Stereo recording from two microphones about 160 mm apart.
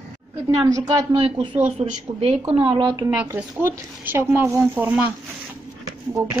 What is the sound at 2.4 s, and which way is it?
Speech, 35° right (ahead or behind).